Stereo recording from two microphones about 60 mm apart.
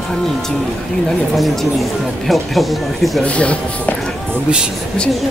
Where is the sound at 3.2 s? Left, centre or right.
Left.